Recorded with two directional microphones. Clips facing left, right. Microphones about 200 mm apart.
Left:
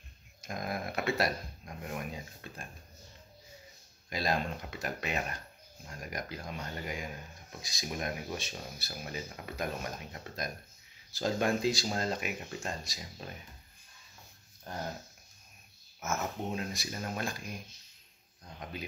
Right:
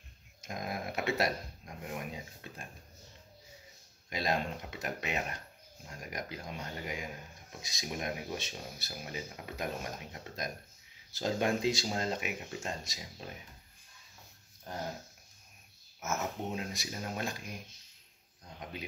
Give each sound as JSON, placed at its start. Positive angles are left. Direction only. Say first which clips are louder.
{"t": 0.4, "sound": "a sound", "louder": "left 2 dB", "side_deg": -15}
{"t": 1.9, "sound": "speech", "louder": "left 1 dB", "side_deg": -15}
{"t": 4.1, "sound": "speech", "louder": "left 1 dB", "side_deg": -20}
{"t": 16.0, "sound": "speech", "louder": "left 1 dB", "side_deg": -20}